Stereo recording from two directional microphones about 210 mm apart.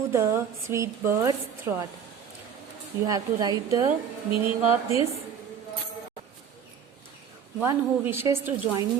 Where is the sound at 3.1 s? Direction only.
15° right (ahead or behind).